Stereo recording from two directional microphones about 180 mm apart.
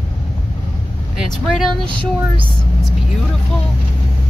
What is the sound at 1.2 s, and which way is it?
Speech, centre (ahead or behind).